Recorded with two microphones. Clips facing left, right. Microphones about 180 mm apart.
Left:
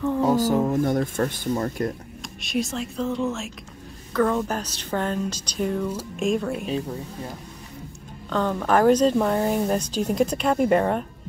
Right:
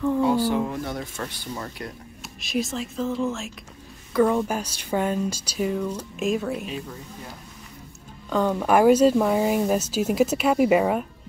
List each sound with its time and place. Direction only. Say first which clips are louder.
0.2 s a sound: left 1 dB; 40° left (ahead or behind)
2.2 s speech: even; centre (ahead or behind)
4.1 s speech: right 2 dB; 10° right (ahead or behind)
8.3 s speech: right 1 dB; 10° right (ahead or behind)